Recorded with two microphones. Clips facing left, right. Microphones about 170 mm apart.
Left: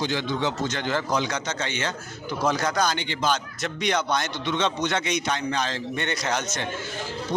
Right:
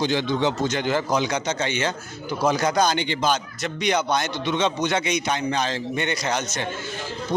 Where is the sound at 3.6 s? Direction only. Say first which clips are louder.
Right 2 dB; centre (ahead or behind).